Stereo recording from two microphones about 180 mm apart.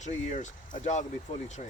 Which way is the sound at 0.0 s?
40° left (ahead or behind).